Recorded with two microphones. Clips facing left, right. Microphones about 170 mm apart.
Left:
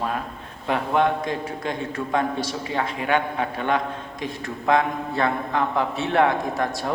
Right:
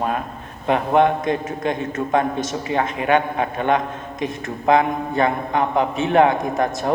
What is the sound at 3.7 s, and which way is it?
A man's voice, 20° right (ahead or behind).